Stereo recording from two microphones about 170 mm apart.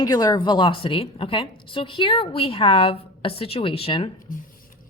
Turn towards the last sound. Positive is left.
turn(degrees=55)  # may be behind; listen again after turning